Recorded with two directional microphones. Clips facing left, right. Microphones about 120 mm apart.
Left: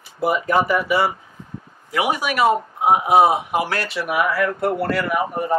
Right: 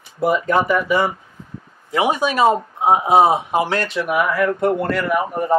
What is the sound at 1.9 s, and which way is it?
Speech, 25° right (ahead or behind).